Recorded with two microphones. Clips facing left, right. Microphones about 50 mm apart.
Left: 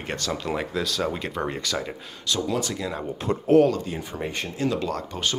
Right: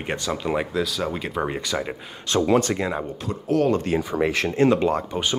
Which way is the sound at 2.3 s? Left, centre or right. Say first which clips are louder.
Right 7 dB; right.